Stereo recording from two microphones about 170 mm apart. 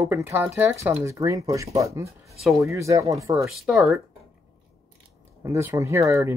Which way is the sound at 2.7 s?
20° right (ahead or behind).